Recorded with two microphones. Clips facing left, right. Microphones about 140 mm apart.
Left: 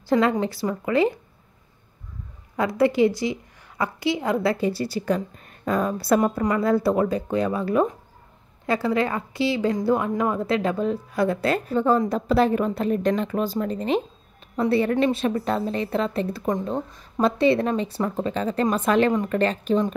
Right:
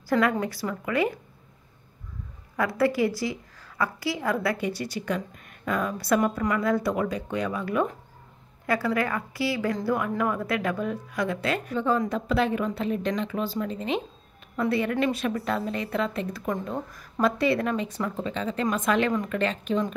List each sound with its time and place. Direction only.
0.1 s speech: 25° left (ahead or behind)
2.5 s a woman's voice: 20° left (ahead or behind)